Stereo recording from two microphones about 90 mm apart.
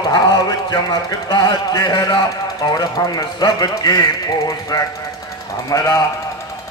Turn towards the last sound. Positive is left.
turn(degrees=40)  # may be behind; listen again after turning